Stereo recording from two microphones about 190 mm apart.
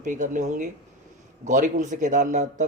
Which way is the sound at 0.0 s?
40° right (ahead or behind).